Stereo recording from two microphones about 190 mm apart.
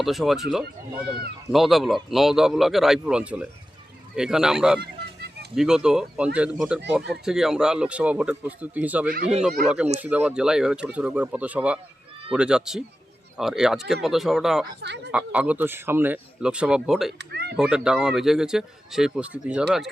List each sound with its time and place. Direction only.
0.0 s speech: centre (ahead or behind)
1.5 s speech: centre (ahead or behind)
4.8 s a sound: 55° right (ahead or behind)
5.5 s speech: 5° right (ahead or behind)
17.2 s speech: 60° right (ahead or behind)
17.6 s speech: 5° right (ahead or behind)